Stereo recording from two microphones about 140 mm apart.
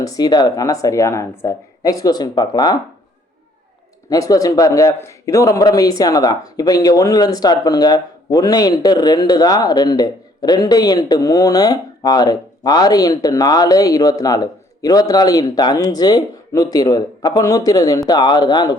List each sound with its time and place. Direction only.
0.0 s a man's voice: 25° left (ahead or behind)
4.1 s a man's voice: 25° left (ahead or behind)